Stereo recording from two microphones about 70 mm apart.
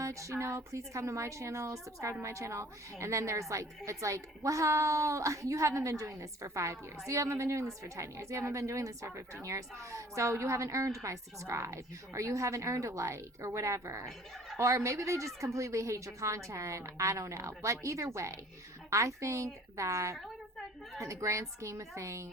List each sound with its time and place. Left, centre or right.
0.0 s speech: right